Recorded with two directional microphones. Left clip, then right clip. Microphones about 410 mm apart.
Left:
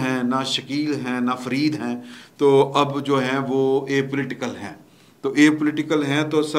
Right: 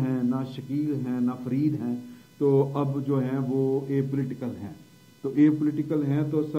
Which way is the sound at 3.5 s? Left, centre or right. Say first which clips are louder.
Left 6 dB; centre.